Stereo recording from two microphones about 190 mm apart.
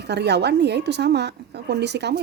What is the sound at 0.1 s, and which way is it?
Speech, 60° right (ahead or behind).